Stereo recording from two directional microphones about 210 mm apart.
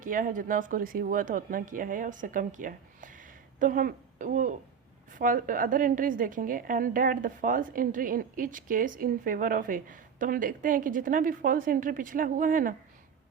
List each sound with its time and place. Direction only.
0.0 s a woman's voice: 40° right (ahead or behind)